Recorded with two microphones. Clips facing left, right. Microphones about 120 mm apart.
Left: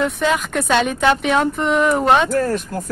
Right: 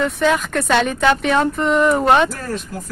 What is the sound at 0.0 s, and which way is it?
Speech, centre (ahead or behind).